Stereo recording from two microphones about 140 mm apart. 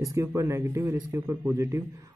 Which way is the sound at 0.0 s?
20° right (ahead or behind).